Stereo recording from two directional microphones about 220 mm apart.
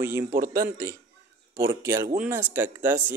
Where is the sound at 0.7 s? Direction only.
15° right (ahead or behind).